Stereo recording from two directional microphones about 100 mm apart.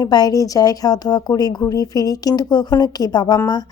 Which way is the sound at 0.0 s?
40° left (ahead or behind).